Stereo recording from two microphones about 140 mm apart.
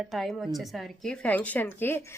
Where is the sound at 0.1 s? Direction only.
Centre (ahead or behind).